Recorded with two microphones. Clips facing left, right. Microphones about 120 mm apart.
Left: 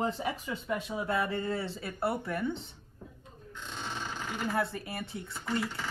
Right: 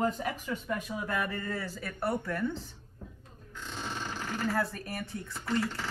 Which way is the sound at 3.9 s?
10° left (ahead or behind).